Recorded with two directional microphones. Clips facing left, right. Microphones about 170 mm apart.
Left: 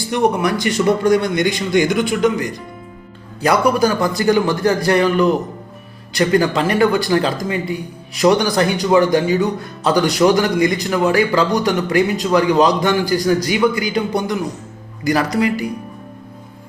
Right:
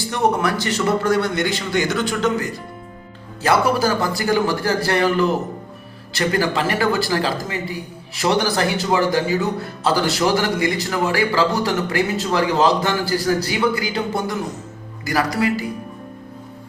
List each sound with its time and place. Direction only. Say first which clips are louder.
0.1 s a man's voice: left 3 dB; 15° left (ahead or behind)